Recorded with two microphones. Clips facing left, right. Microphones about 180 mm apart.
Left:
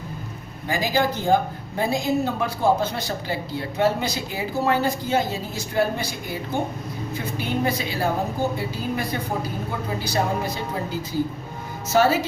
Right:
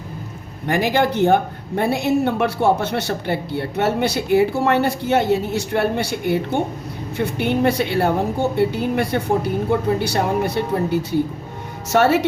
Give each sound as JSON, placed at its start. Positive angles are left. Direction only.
{"t": 0.7, "sound": "a woman's voice", "side_deg": -65}